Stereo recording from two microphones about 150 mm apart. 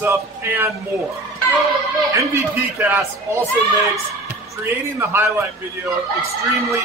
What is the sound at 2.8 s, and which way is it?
Speech, 15° right (ahead or behind).